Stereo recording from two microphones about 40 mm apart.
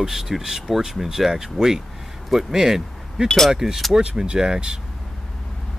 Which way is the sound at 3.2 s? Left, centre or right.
Centre.